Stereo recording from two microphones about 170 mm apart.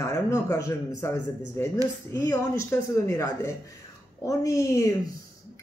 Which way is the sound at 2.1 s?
20° left (ahead or behind).